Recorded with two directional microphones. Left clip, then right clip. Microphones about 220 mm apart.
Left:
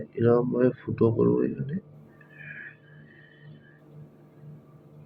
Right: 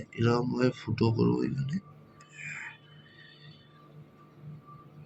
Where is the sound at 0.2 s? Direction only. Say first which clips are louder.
Left 6 dB; 45° right (ahead or behind).